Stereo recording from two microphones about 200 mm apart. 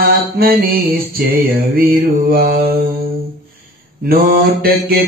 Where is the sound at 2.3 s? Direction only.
50° right (ahead or behind).